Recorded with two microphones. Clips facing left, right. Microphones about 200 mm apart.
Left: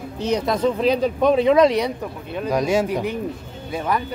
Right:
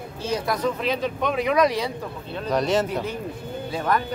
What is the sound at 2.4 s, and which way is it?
Speech, 10° left (ahead or behind).